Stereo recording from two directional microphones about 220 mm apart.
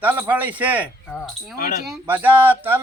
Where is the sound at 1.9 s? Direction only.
10° right (ahead or behind).